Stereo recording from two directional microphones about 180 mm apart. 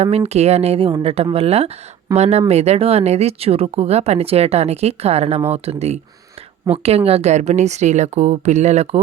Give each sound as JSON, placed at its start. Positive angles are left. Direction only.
{"t": 0.0, "sound": "speech", "side_deg": -35}